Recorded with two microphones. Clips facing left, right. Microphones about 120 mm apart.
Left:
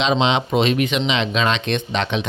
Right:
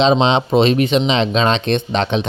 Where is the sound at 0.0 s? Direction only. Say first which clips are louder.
Right 5 dB; 35° right (ahead or behind).